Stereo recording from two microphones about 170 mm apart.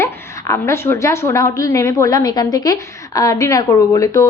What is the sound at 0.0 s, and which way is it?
A woman's voice, 15° left (ahead or behind).